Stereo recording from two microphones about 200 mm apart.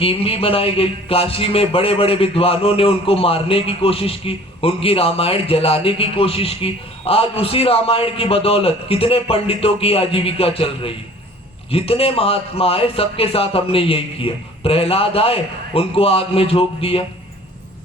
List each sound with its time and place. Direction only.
0.0 s a man's voice: 30° left (ahead or behind)